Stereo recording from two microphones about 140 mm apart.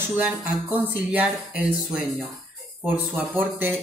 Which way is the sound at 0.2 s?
10° right (ahead or behind).